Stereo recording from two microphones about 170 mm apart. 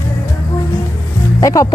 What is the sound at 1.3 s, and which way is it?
Speech, 20° left (ahead or behind).